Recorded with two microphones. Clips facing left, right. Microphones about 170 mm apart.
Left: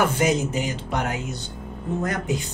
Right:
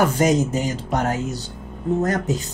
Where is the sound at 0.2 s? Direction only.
40° right (ahead or behind).